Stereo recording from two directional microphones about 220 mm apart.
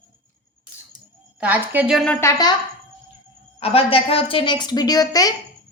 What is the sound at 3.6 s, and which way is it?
A woman's voice, 25° left (ahead or behind).